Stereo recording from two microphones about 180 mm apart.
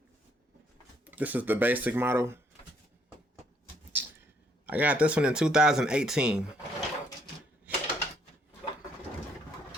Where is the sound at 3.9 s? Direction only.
10° right (ahead or behind).